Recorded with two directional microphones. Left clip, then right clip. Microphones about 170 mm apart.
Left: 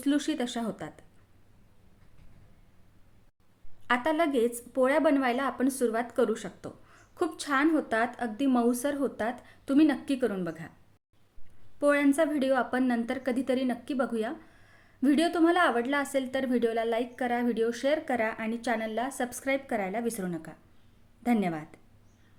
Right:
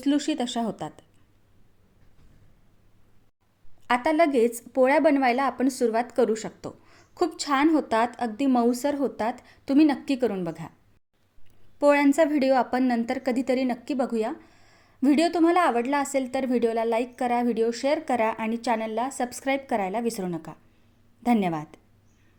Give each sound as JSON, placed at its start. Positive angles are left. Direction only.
{"t": 0.0, "sound": "a woman's voice", "side_deg": -20}
{"t": 3.8, "sound": "a woman's voice", "side_deg": -25}
{"t": 11.8, "sound": "a woman's voice", "side_deg": -25}